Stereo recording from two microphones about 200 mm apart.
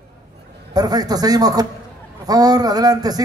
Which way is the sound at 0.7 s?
20° right (ahead or behind).